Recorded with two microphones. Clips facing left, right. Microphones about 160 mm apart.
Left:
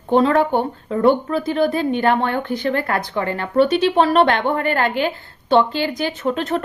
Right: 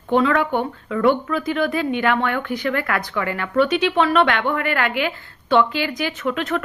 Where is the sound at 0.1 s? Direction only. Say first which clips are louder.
Left 3 dB; 35° left (ahead or behind).